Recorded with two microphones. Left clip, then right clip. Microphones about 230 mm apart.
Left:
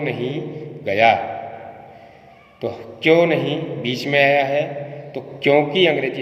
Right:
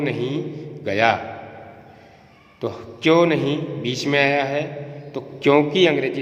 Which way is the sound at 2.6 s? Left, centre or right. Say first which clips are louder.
Left 2 dB; centre.